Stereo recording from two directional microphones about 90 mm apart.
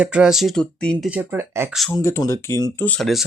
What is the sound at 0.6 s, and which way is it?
Speech, 10° left (ahead or behind).